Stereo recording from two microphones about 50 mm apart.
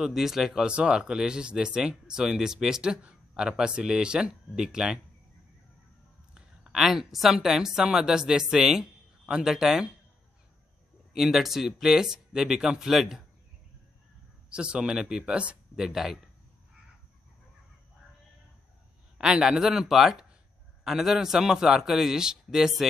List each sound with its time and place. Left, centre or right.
0.0 s speech: centre
6.3 s a sound: centre
7.3 s speech: centre
11.1 s speech: centre
14.5 s speech: centre
19.1 s speech: centre